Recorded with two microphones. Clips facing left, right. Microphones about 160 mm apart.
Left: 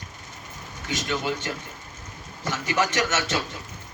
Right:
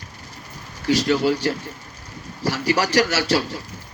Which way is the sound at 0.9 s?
35° right (ahead or behind).